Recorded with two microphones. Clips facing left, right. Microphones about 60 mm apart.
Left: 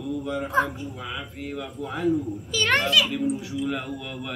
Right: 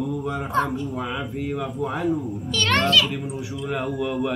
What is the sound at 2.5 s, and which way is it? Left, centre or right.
Speech, centre.